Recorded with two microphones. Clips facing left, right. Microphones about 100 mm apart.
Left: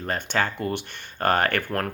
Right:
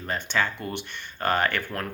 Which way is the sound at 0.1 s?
45° left (ahead or behind).